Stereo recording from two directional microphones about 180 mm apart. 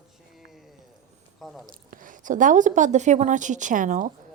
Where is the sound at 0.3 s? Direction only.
Centre (ahead or behind).